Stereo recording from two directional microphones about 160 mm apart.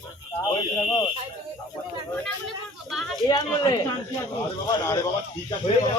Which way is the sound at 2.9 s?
Centre (ahead or behind).